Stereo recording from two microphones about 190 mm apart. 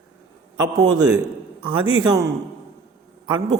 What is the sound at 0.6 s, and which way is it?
A man's voice, 20° right (ahead or behind).